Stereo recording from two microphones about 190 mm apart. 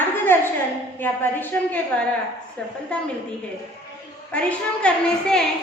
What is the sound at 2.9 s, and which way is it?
Speech, 5° left (ahead or behind).